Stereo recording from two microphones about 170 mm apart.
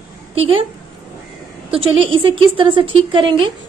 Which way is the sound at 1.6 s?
30° right (ahead or behind).